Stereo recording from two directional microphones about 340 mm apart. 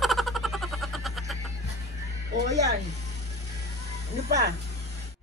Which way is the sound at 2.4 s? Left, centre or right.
Centre.